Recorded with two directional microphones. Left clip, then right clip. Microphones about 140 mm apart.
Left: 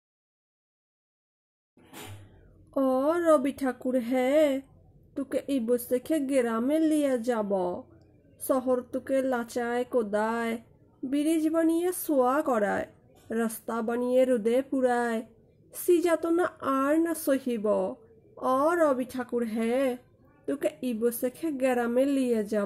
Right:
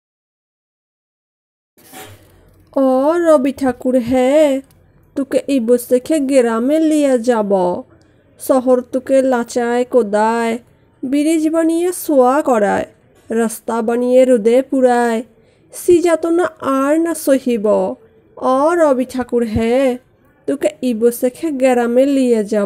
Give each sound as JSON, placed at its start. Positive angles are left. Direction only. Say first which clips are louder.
{"t": 2.7, "sound": "a woman's voice", "louder": "right 12 dB", "side_deg": -35}
{"t": 5.1, "sound": "a woman's voice", "louder": "right 14 dB", "side_deg": -45}